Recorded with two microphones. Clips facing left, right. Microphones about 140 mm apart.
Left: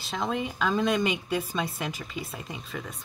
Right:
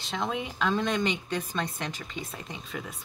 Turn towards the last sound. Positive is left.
turn(degrees=0)  # may be behind; listen again after turning